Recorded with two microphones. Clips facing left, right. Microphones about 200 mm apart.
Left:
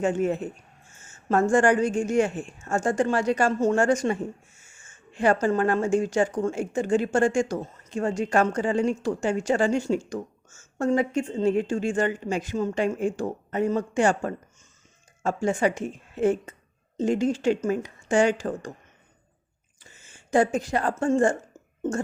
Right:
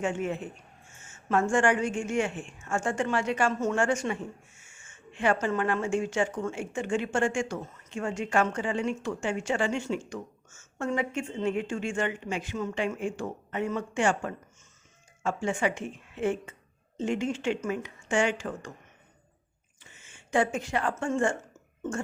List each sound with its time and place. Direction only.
0.0 s a woman's voice: 40° left (ahead or behind)
19.8 s speech: 40° left (ahead or behind)